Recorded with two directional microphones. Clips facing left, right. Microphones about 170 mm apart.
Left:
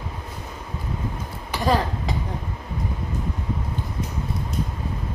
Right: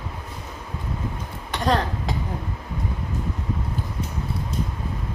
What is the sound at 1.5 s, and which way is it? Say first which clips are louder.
Speech: left 1 dB; 5° left (ahead or behind).